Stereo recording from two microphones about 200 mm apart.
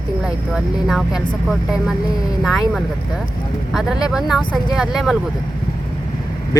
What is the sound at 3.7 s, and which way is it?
Speech, centre (ahead or behind).